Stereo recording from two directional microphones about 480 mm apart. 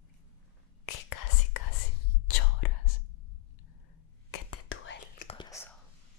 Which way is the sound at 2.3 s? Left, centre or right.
Left.